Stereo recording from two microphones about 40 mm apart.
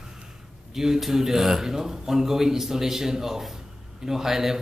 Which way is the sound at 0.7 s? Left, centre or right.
Centre.